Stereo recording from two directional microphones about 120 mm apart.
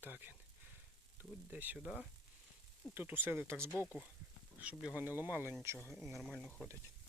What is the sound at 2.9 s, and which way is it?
Speech, 15° right (ahead or behind).